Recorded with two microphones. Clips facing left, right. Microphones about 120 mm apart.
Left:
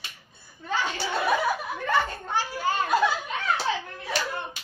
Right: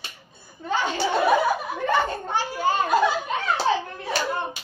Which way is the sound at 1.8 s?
25° right (ahead or behind).